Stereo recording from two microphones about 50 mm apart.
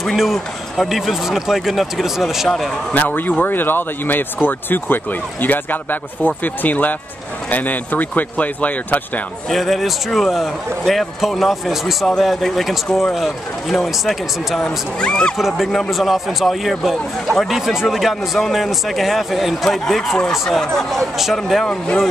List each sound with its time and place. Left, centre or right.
0.0 s a man's voice: centre
2.9 s speech: left
9.5 s a man's voice: centre
14.6 s speech: centre
15.3 s a man's voice: centre
17.6 s a man's voice: centre
21.6 s speech: centre